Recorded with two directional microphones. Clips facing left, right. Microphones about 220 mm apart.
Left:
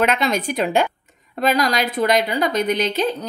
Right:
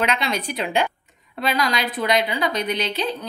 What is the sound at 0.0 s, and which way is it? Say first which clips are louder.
A woman's voice: left 4 dB; 45° left (ahead or behind).